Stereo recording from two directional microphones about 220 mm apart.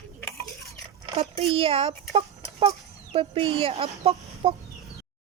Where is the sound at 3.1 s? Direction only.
25° right (ahead or behind).